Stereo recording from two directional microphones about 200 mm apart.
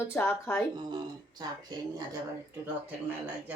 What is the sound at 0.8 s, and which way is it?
Speech, 20° right (ahead or behind).